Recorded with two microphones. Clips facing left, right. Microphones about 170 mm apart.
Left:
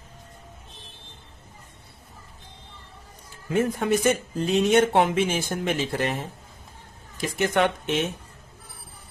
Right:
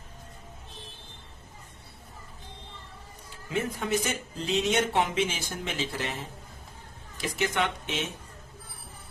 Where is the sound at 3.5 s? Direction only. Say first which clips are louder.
Left 6 dB; 50° left (ahead or behind).